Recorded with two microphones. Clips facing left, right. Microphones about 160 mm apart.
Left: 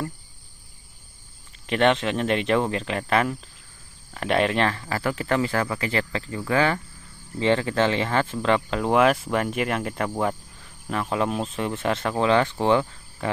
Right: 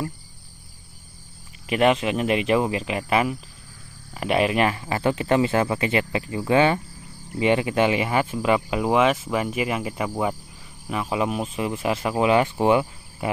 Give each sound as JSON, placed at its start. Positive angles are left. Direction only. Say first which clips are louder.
{"t": 1.7, "sound": "speech", "louder": "right 1 dB", "side_deg": -5}